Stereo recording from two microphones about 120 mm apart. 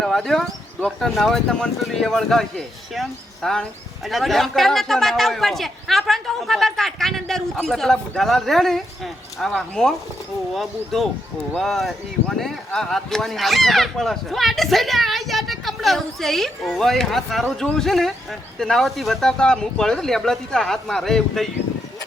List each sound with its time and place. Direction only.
0.0 s speech: 5° left (ahead or behind)